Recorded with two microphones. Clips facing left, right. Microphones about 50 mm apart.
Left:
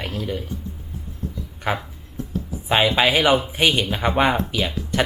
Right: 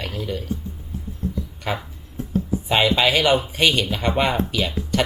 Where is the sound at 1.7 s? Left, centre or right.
Centre.